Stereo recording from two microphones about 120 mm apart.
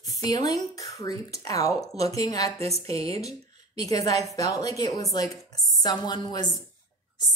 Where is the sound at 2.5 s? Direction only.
60° right (ahead or behind).